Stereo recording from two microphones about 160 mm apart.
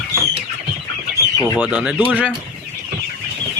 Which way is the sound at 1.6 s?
5° right (ahead or behind).